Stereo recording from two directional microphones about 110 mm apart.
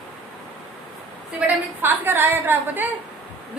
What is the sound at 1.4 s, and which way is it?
A woman's voice, 20° right (ahead or behind).